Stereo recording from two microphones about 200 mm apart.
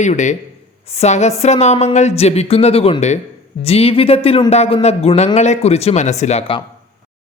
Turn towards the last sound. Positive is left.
turn(degrees=30)  # may be behind; listen again after turning